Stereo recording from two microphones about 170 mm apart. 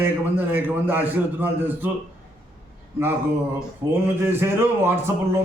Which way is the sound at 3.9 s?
15° right (ahead or behind).